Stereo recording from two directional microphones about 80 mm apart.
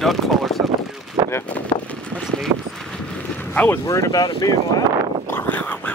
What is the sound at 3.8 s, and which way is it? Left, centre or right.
Speech, left.